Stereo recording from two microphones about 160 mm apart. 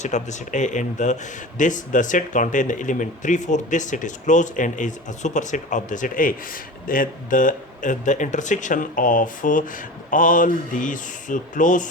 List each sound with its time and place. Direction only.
0.0 s a man's voice: 50° left (ahead or behind)